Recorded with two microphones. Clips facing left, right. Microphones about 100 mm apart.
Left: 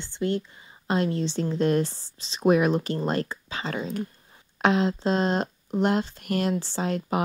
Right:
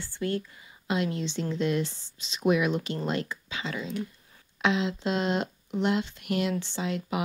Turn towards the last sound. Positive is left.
turn(degrees=40)  # may be behind; listen again after turning